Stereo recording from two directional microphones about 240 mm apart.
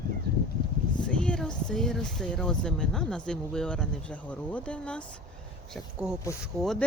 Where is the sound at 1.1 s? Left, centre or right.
Centre.